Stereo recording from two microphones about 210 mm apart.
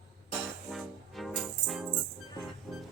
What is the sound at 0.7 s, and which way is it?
Music, centre (ahead or behind).